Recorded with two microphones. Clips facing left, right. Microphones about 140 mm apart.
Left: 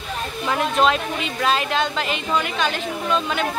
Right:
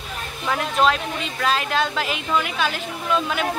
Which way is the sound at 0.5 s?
Centre (ahead or behind).